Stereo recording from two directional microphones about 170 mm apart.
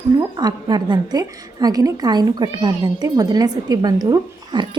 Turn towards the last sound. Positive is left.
turn(degrees=-25)  # may be behind; listen again after turning